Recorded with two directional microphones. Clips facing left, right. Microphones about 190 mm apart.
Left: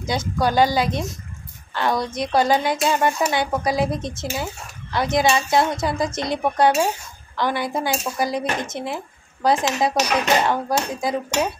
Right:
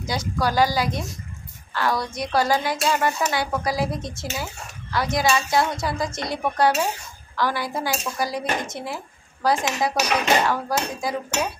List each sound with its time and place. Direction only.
0.0 s a woman's voice: 25° left (ahead or behind)